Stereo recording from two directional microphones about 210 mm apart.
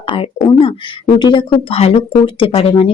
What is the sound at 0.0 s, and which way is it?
Speech, 25° left (ahead or behind).